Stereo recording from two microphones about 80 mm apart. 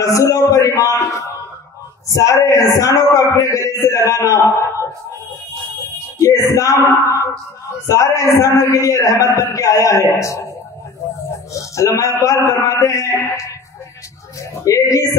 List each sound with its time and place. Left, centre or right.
0.0 s a man's voice: left
6.1 s a man's voice: left
11.7 s a man's voice: left
14.9 s a man's voice: left